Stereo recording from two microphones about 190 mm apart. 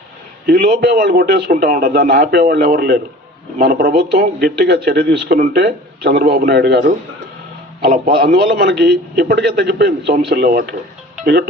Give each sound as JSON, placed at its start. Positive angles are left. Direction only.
{"t": 0.4, "sound": "a man's voice", "side_deg": -50}